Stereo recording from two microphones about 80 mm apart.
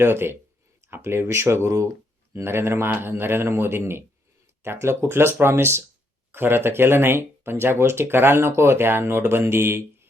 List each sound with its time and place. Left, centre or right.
0.0 s speech: right